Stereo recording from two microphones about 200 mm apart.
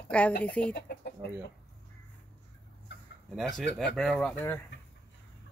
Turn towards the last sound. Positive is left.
turn(degrees=10)  # may be behind; listen again after turning